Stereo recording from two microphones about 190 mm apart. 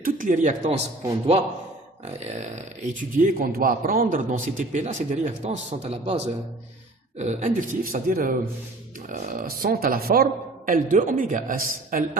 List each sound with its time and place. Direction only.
0.0 s speech: 45° right (ahead or behind)
2.1 s a man's voice: 40° right (ahead or behind)